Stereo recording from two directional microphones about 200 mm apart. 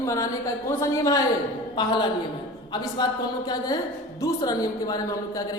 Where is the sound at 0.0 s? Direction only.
15° left (ahead or behind).